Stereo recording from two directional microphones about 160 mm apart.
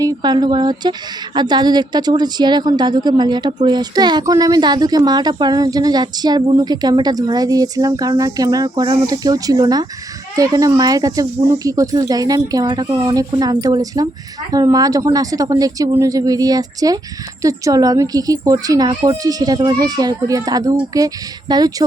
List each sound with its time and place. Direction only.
0.0 s speech: 25° right (ahead or behind)